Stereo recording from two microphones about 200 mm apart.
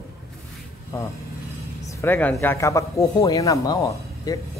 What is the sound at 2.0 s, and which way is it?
Speech, 10° left (ahead or behind).